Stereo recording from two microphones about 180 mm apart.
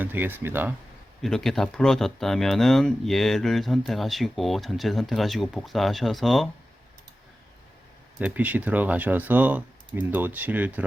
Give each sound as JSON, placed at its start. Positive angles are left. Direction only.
{"t": 0.0, "sound": "speech", "side_deg": -10}
{"t": 1.2, "sound": "speech", "side_deg": 0}
{"t": 8.2, "sound": "speech", "side_deg": -10}